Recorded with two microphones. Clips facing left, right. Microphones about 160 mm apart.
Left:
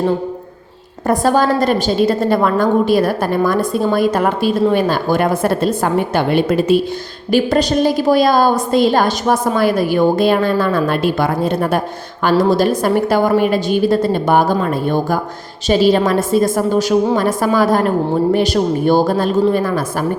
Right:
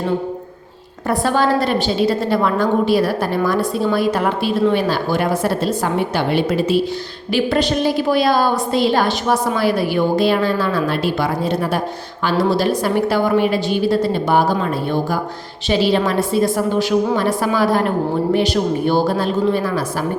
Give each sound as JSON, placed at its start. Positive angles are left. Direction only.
{"t": 1.0, "sound": "a woman's voice", "side_deg": 45}